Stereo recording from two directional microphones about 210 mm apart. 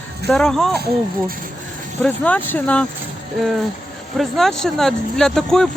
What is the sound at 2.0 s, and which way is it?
Speech, 5° left (ahead or behind).